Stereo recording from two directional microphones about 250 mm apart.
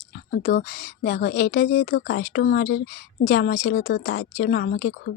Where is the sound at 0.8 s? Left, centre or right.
Left.